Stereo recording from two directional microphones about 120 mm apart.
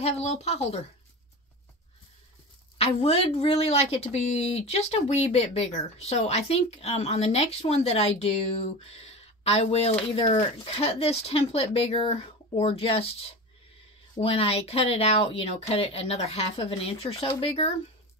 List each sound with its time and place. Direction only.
0.0 s speech: 65° left (ahead or behind)
2.8 s speech: 60° left (ahead or behind)
10.0 s speech: 50° left (ahead or behind)
14.2 s speech: 55° left (ahead or behind)